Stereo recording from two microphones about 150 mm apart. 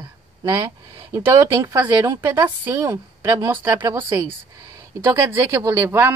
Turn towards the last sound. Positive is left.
turn(degrees=-15)  # may be behind; listen again after turning